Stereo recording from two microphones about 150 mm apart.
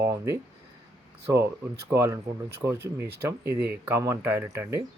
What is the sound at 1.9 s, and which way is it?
Speech, 20° right (ahead or behind).